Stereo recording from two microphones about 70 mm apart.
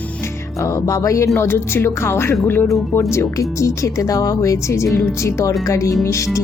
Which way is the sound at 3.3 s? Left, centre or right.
Left.